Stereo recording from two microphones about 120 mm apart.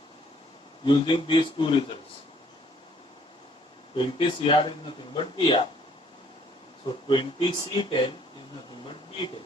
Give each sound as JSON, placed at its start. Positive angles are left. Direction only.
{"t": 0.9, "sound": "speech", "side_deg": 45}
{"t": 3.9, "sound": "speech", "side_deg": 45}
{"t": 7.1, "sound": "speech", "side_deg": 45}